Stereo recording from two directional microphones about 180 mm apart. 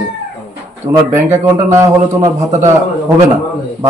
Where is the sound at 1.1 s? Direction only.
15° right (ahead or behind).